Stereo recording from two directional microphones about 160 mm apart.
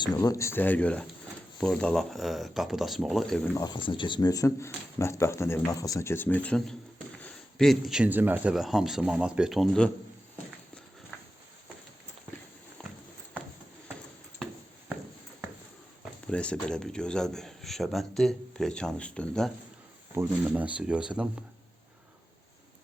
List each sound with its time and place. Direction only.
0.2 s speech: 20° left (ahead or behind); by 3.5 s centre (ahead or behind)
3.5 s speech: 25° left (ahead or behind); by 9.9 s centre (ahead or behind)
12.8 s clip-clop: 10° left (ahead or behind)
16.2 s speech: 5° left (ahead or behind)
20.1 s speech: 10° right (ahead or behind)